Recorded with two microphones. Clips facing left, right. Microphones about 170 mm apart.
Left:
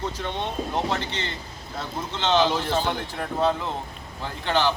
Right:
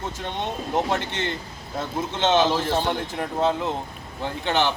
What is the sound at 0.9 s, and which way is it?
Speech, 55° right (ahead or behind).